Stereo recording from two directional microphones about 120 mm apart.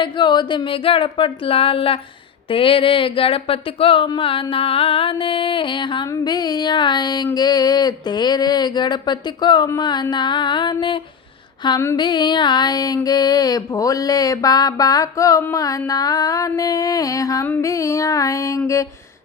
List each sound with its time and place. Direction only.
0.0 s speech: 40° left (ahead or behind)
7.3 s a sound: 35° left (ahead or behind)
17.6 s music: 25° left (ahead or behind)